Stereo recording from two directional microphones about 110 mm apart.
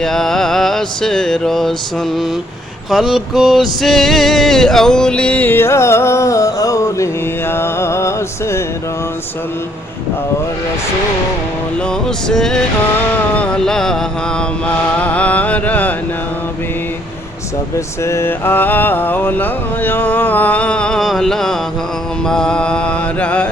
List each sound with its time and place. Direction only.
0.0 s music: 5° left (ahead or behind)
2.9 s male singing: centre (ahead or behind); by 8.6 s 25° left (ahead or behind)
11.9 s music: 5° left (ahead or behind)
13.3 s male singing: 10° left (ahead or behind)
17.7 s male singing: 25° left (ahead or behind)